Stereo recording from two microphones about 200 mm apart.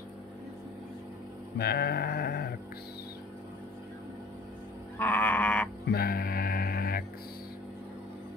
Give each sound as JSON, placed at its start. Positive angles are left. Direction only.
{"t": 1.6, "sound": "a sound", "side_deg": 50}
{"t": 4.9, "sound": "livestock", "side_deg": 10}
{"t": 5.9, "sound": "music", "side_deg": 50}